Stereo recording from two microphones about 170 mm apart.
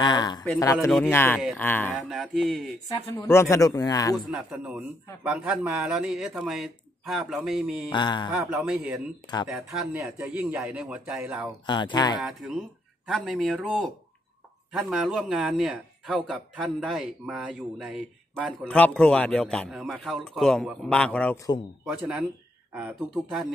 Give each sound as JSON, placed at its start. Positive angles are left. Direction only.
{"t": 0.0, "sound": "speech", "side_deg": 25}
{"t": 0.9, "sound": "speech", "side_deg": 10}
{"t": 2.0, "sound": "speech", "side_deg": 0}
{"t": 3.2, "sound": "speech", "side_deg": 15}
{"t": 4.3, "sound": "speech", "side_deg": -5}
{"t": 7.9, "sound": "speech", "side_deg": 25}
{"t": 8.3, "sound": "speech", "side_deg": -5}
{"t": 11.6, "sound": "speech", "side_deg": 25}
{"t": 12.2, "sound": "speech", "side_deg": 0}
{"t": 21.8, "sound": "speech", "side_deg": -5}